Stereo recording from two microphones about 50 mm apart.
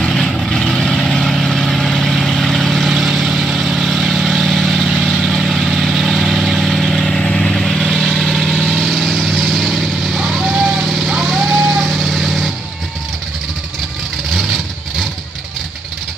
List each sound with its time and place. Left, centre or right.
0.1 s vehicle: centre
7.2 s vehicle: centre
7.8 s vehicle: centre
10.7 s vehicle: centre
14.3 s vehicle: centre